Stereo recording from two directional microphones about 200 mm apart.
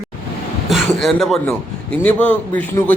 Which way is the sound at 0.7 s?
Centre (ahead or behind).